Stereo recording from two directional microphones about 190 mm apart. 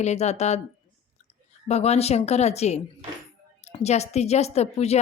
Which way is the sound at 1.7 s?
35° left (ahead or behind).